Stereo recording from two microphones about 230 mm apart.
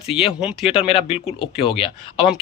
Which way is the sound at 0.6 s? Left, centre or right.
Left.